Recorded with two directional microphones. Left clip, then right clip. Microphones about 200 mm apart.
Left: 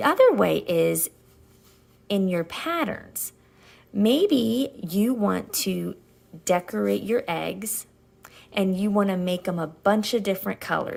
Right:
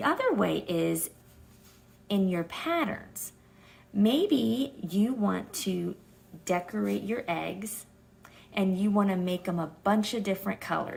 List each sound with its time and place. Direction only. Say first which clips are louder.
0.0 s speech: left 9 dB; 45° left (ahead or behind)
2.0 s a woman's voice: left 5 dB; 45° left (ahead or behind)
8.2 s a sound: left 6 dB; 45° left (ahead or behind)
9.0 s speech: left 6 dB; 40° left (ahead or behind)